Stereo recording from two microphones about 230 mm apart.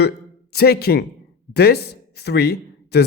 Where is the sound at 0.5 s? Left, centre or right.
Left.